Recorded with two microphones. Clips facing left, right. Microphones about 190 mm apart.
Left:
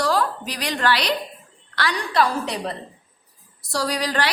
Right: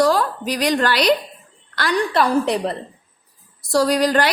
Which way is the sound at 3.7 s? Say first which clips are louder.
Right 8 dB; 50° right (ahead or behind).